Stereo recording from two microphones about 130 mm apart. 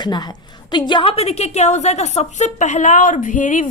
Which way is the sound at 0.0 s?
35° left (ahead or behind).